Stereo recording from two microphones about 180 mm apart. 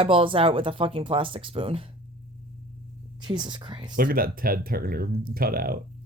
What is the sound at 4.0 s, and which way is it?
Speech, 50° right (ahead or behind).